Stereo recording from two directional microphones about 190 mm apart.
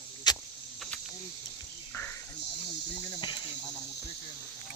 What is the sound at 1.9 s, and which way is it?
Cricket, 15° left (ahead or behind).